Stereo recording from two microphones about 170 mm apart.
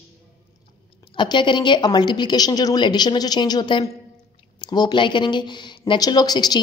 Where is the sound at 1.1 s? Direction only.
25° left (ahead or behind).